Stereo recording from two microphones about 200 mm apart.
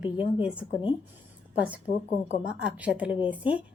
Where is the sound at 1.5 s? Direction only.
5° right (ahead or behind).